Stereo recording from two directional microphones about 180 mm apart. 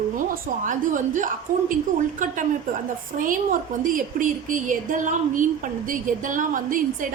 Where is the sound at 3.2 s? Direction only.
50° right (ahead or behind).